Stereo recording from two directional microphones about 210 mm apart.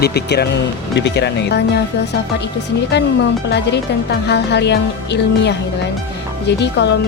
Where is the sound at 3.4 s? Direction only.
55° left (ahead or behind).